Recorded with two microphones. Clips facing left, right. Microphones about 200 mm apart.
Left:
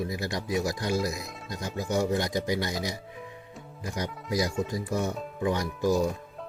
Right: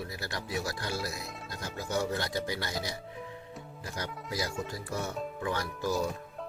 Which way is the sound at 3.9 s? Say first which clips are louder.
Left 7 dB; 15° left (ahead or behind).